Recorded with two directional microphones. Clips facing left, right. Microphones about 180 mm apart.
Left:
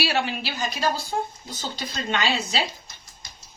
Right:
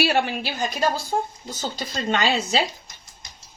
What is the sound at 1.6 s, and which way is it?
Speech, 45° right (ahead or behind).